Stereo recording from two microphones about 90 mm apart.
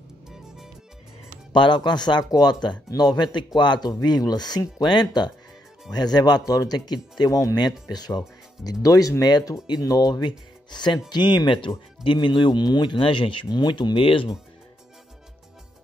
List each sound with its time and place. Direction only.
1.5 s speech: 60° left (ahead or behind)